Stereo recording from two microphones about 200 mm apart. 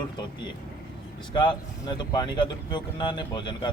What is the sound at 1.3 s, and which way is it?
Speech, 20° left (ahead or behind).